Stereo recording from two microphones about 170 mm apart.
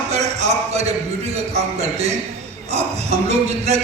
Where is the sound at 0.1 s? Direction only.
40° right (ahead or behind).